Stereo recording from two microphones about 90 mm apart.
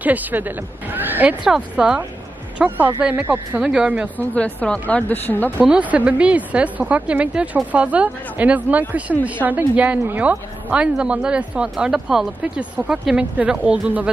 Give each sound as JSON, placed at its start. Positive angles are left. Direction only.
{"t": 0.0, "sound": "speech", "side_deg": -20}
{"t": 1.4, "sound": "speech", "side_deg": -10}
{"t": 3.0, "sound": "speech", "side_deg": -15}
{"t": 4.2, "sound": "speech", "side_deg": 15}
{"t": 5.6, "sound": "speech", "side_deg": -15}